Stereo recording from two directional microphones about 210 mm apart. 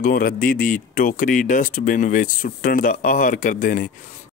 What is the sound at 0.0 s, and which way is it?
Speech, 45° left (ahead or behind).